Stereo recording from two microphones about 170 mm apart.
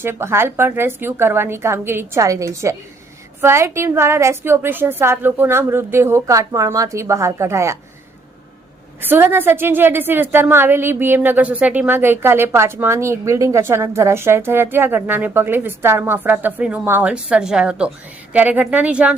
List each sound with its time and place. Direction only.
0.0 s a woman's voice: 15° right (ahead or behind)
9.0 s a woman's voice: 10° right (ahead or behind)